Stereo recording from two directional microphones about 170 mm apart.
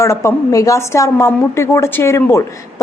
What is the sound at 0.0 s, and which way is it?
A woman's voice, 15° left (ahead or behind).